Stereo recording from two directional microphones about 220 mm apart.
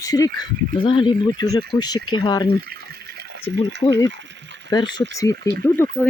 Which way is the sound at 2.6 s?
45° right (ahead or behind).